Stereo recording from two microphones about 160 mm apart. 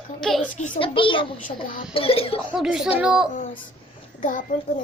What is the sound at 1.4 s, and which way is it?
Speech, 60° left (ahead or behind).